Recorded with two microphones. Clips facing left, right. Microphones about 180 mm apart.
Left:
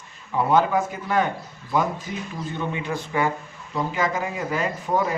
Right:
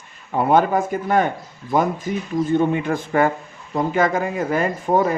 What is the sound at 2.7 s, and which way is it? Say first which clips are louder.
Speech: right 6 dB; 50° right (ahead or behind).